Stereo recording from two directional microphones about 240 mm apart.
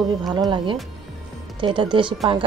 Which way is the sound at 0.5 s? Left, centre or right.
Right.